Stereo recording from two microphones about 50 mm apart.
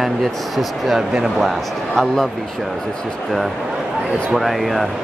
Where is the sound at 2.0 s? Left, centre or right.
Centre.